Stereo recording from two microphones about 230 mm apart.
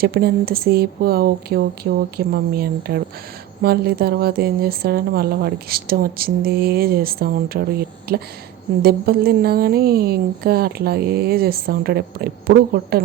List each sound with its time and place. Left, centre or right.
0.0 s speech: right